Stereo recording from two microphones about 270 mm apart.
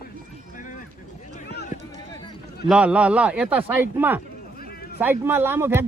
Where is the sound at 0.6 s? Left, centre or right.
Left.